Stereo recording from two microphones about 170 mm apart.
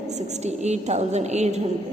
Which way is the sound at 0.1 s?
40° right (ahead or behind).